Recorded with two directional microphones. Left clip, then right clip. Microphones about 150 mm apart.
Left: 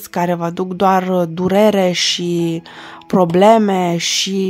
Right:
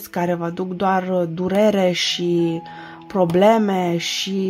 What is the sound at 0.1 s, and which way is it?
Speech, 25° left (ahead or behind).